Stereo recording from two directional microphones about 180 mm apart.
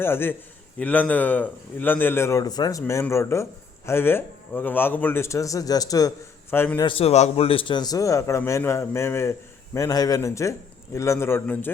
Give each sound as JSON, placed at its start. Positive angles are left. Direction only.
{"t": 0.0, "sound": "speech", "side_deg": 10}
{"t": 6.8, "sound": "speech", "side_deg": 30}